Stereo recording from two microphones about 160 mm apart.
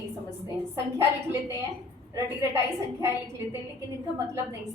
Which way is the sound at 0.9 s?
15° right (ahead or behind).